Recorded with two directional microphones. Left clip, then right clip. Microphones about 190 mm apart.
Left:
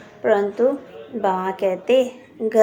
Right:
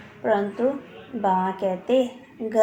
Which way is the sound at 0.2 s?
30° left (ahead or behind).